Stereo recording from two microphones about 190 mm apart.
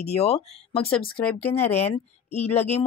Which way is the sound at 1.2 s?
5° left (ahead or behind).